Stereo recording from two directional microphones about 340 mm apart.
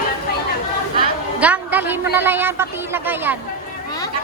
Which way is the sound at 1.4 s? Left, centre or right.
Centre.